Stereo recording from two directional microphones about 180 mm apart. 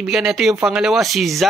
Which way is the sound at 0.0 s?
Centre (ahead or behind).